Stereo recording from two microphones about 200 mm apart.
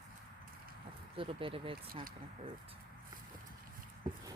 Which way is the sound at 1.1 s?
25° right (ahead or behind).